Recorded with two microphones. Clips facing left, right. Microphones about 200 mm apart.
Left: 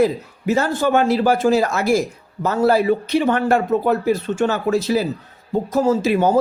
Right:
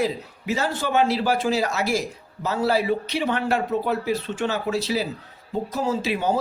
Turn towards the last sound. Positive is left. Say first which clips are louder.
# left 7 dB
turn(degrees=50)  # may be behind; listen again after turning